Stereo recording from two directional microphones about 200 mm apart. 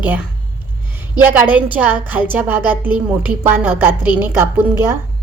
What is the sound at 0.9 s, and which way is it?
A woman's voice, 10° right (ahead or behind).